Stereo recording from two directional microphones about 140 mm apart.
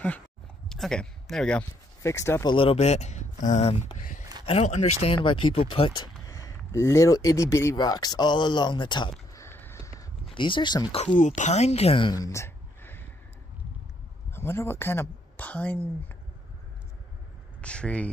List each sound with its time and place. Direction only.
0.7 s speech: 5° left (ahead or behind)
2.0 s speech: 20° left (ahead or behind)
2.4 s speech: 40° left (ahead or behind)
5.1 s speech: 35° left (ahead or behind)
9.3 s a sound: 20° left (ahead or behind)
10.3 s speech: 35° left (ahead or behind)
11.1 s speech: 60° left (ahead or behind); by 12.1 s 45° left (ahead or behind)
12.1 s a sound: 25° left (ahead or behind)
14.3 s speech: 15° left (ahead or behind)
17.6 s speech: 10° left (ahead or behind)